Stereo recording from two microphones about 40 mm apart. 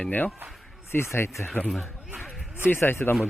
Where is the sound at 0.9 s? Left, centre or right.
Left.